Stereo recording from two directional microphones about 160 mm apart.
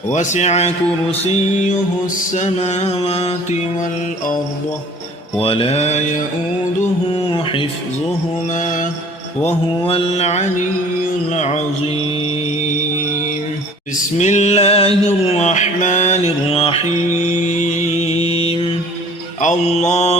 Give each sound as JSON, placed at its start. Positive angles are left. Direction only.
{"t": 0.1, "sound": "music", "side_deg": 50}
{"t": 5.4, "sound": "music", "side_deg": 35}
{"t": 7.3, "sound": "music", "side_deg": 35}
{"t": 8.5, "sound": "mantra", "side_deg": 55}
{"t": 9.8, "sound": "music", "side_deg": 35}
{"t": 14.2, "sound": "music", "side_deg": 45}
{"t": 17.2, "sound": "mantra", "side_deg": 50}
{"t": 19.4, "sound": "mantra", "side_deg": 45}